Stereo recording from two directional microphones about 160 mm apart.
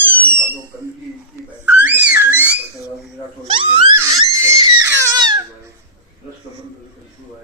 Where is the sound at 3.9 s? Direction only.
15° right (ahead or behind).